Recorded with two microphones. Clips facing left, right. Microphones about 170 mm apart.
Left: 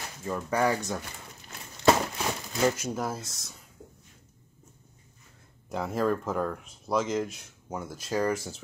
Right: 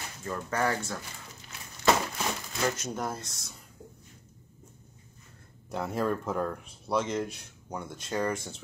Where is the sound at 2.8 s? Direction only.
Centre (ahead or behind).